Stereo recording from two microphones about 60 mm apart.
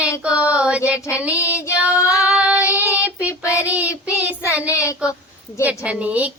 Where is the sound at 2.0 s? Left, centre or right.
Left.